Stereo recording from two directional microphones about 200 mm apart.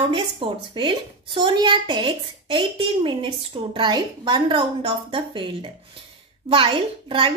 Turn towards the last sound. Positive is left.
turn(degrees=-25)  # may be behind; listen again after turning